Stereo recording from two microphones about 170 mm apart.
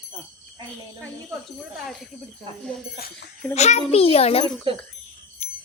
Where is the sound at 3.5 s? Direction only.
40° left (ahead or behind).